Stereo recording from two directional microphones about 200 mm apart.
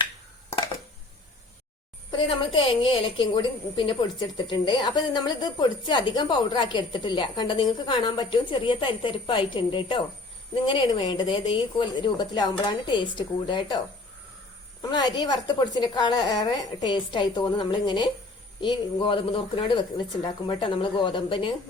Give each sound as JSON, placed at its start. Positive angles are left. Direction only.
{"t": 2.0, "sound": "a woman's voice", "side_deg": 25}
{"t": 14.8, "sound": "a woman's voice", "side_deg": 20}